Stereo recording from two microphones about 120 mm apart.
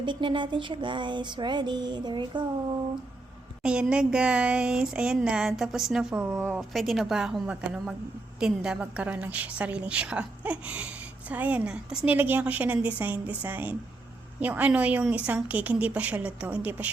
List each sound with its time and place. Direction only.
0.0 s music: 45° right (ahead or behind)
3.6 s a woman's voice: 5° right (ahead or behind)